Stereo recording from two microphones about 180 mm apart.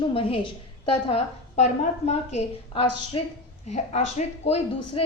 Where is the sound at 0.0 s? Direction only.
30° left (ahead or behind).